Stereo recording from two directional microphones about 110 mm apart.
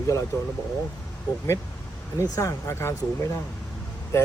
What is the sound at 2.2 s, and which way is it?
Speech, 30° left (ahead or behind).